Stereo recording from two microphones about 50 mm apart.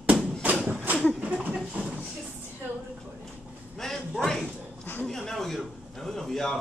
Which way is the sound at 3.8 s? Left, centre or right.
Centre.